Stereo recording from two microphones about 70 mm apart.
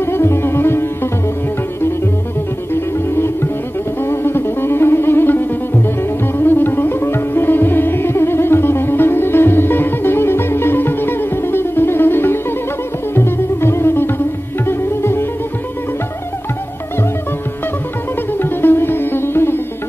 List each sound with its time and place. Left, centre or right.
0.0 s music: left
4.0 s music: left
14.7 s sitar: left
18.4 s sitar: left